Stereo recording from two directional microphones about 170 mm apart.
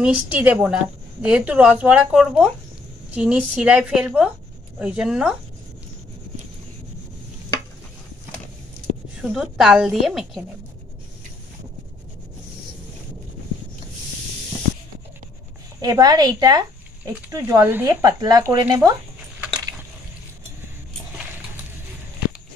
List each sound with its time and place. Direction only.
0.0 s a woman's voice: 10° right (ahead or behind)
9.2 s a woman's voice: centre (ahead or behind)
15.8 s speech: 25° right (ahead or behind)